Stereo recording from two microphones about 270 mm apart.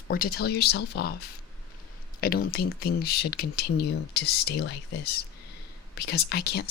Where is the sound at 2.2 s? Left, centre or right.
Left.